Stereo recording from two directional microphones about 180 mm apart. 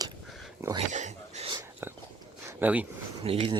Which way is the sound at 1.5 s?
15° right (ahead or behind).